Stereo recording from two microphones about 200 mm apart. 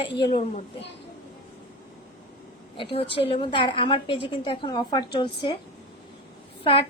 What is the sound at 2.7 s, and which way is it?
A woman's voice, 30° left (ahead or behind).